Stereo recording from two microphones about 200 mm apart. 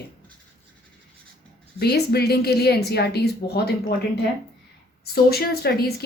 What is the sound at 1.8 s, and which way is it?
Speech, 55° left (ahead or behind).